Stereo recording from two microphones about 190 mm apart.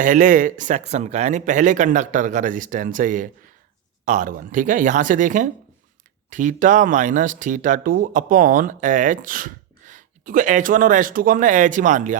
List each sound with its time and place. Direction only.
0.0 s speech: 45° right (ahead or behind)